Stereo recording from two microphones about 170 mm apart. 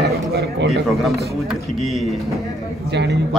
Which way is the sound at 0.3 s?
65° right (ahead or behind).